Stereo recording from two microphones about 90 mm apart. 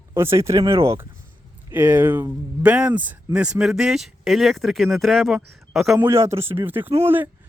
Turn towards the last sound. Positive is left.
turn(degrees=-25)  # may be behind; listen again after turning